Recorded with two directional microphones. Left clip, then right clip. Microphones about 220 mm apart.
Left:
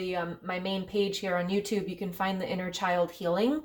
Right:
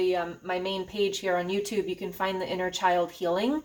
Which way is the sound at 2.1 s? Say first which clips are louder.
Right 2 dB; 25° left (ahead or behind).